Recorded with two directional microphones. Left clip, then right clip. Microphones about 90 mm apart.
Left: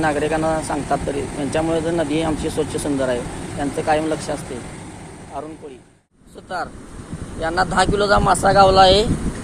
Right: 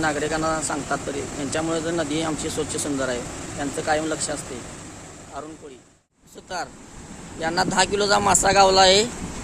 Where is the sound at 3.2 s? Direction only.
Centre (ahead or behind); by 5.5 s 20° right (ahead or behind).